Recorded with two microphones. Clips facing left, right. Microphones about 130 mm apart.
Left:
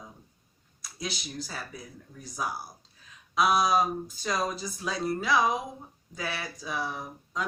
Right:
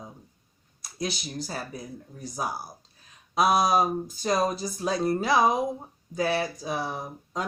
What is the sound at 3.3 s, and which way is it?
Speech, 45° right (ahead or behind).